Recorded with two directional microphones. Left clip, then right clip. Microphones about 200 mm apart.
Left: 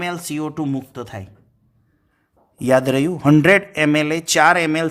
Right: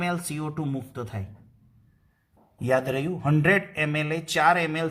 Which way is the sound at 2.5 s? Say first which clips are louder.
Left 8 dB; 50° left (ahead or behind).